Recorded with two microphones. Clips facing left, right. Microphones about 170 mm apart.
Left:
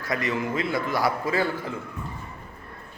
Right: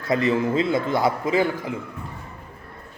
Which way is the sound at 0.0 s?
25° right (ahead or behind).